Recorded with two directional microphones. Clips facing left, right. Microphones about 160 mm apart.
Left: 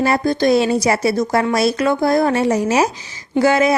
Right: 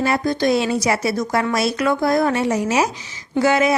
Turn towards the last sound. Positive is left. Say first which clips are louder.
# left 2 dB
turn(degrees=35)  # may be behind; listen again after turning